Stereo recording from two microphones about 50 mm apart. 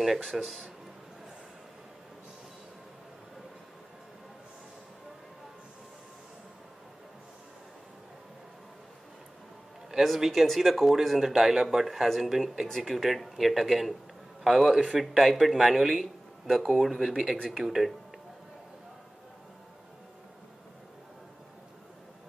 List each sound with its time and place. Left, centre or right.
0.3 s speech: centre
9.8 s speech: centre
12.6 s speech: centre